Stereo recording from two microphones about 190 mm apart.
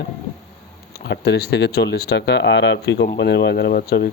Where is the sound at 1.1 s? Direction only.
60° left (ahead or behind).